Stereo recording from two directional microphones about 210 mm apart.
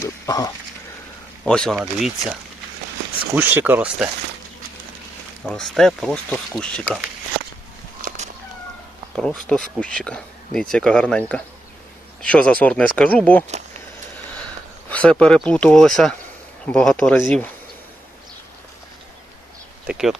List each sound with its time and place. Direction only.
0.0 s wild animals: 15° left (ahead or behind)
1.5 s speech: 5° left (ahead or behind)
3.3 s speech: 10° right (ahead or behind)
5.5 s speech: centre (ahead or behind)
8.0 s cat: 35° right (ahead or behind)
9.1 s speech: 5° left (ahead or behind)
14.8 s speech: 5° left (ahead or behind)
19.9 s speech: centre (ahead or behind)